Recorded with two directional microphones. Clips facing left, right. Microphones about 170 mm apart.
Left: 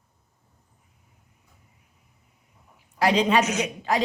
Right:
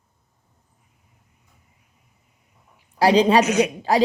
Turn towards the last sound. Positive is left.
turn(degrees=-35)  # may be behind; listen again after turning